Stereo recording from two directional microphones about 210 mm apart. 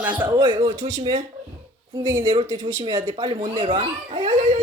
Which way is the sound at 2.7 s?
20° right (ahead or behind).